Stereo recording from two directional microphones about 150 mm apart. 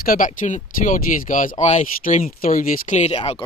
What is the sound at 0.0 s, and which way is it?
Speech, 70° left (ahead or behind).